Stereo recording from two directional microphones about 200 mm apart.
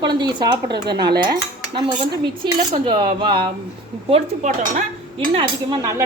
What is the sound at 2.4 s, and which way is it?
Speech, 25° right (ahead or behind).